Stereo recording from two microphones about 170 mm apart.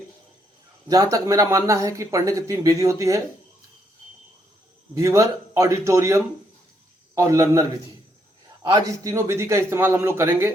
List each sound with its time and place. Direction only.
0.9 s speech: 20° right (ahead or behind)
4.9 s a man's voice: 20° right (ahead or behind)